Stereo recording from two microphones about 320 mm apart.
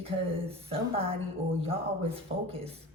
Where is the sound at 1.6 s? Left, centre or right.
Centre.